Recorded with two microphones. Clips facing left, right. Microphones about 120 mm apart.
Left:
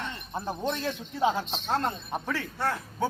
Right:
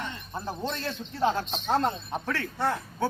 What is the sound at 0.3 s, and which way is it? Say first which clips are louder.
Speech: left 2 dB; 15° left (ahead or behind).